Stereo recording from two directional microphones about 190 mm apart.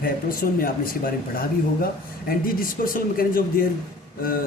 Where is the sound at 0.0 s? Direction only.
50° left (ahead or behind).